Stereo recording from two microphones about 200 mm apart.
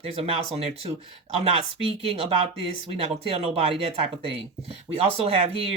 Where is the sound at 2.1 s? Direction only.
30° right (ahead or behind).